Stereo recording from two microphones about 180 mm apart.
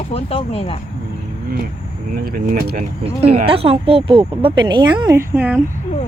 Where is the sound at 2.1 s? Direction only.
55° right (ahead or behind).